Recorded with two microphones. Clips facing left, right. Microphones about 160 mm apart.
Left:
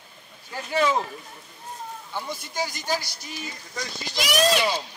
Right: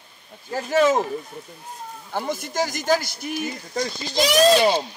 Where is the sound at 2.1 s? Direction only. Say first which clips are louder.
Right 6 dB; 45° right (ahead or behind).